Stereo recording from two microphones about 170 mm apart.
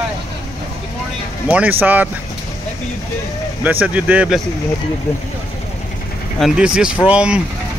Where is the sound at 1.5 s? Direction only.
10° right (ahead or behind).